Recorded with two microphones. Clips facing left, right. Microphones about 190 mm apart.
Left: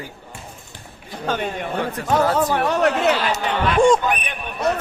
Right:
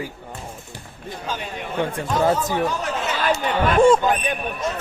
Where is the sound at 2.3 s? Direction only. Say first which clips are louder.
Left 3 dB; 65° left (ahead or behind).